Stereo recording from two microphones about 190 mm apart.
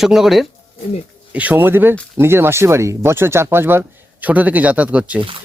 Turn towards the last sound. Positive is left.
turn(degrees=-5)  # may be behind; listen again after turning